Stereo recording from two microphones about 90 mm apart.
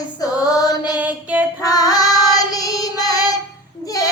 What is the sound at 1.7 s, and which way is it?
Female singing, 45° left (ahead or behind).